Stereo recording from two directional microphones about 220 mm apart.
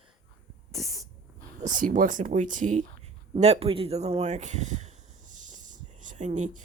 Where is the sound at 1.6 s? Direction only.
35° right (ahead or behind).